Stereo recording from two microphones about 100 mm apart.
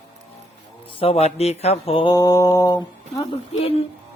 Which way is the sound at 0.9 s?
70° left (ahead or behind).